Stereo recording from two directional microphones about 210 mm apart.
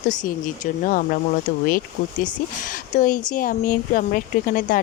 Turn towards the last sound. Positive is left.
turn(degrees=40)  # may be behind; listen again after turning